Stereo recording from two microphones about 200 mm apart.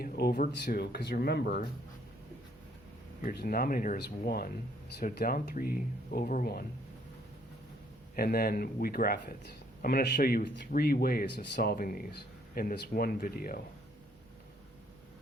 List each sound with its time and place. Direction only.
0.0 s a man's voice: 50° left (ahead or behind)
3.2 s a man's voice: 45° left (ahead or behind)
8.1 s a man's voice: 50° left (ahead or behind)